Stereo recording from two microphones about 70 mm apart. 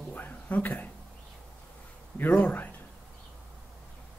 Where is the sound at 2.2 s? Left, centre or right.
Left.